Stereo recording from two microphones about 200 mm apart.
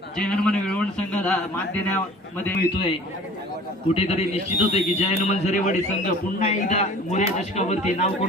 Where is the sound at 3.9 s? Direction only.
30° left (ahead or behind).